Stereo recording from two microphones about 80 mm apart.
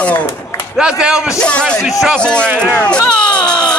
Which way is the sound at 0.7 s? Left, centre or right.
Centre.